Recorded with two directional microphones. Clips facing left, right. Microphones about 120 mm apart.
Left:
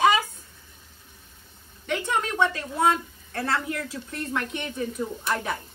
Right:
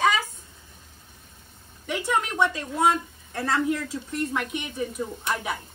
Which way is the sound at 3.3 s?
15° right (ahead or behind).